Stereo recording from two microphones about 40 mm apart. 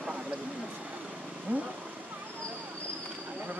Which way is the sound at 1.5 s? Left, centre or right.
Right.